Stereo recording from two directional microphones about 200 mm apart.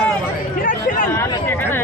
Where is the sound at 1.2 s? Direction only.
10° left (ahead or behind).